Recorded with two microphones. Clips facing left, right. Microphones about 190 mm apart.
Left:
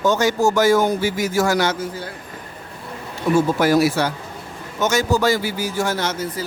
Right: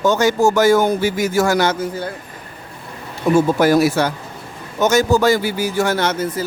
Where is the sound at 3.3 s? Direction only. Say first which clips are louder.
Right 3 dB; 45° right (ahead or behind).